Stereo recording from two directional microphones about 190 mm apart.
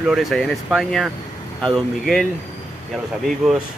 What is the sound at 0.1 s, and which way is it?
Speech, centre (ahead or behind).